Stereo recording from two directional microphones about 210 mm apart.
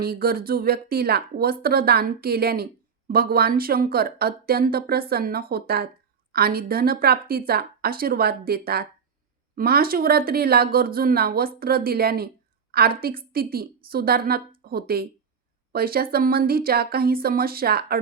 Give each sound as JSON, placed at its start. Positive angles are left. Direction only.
{"t": 0.0, "sound": "speech", "side_deg": -45}